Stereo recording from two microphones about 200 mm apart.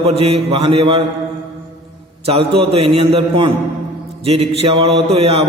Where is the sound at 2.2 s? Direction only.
30° right (ahead or behind).